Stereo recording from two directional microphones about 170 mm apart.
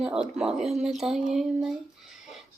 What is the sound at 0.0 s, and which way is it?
Speech, 5° right (ahead or behind).